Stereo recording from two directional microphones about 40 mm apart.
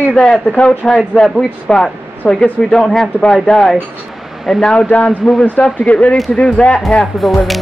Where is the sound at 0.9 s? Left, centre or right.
Centre.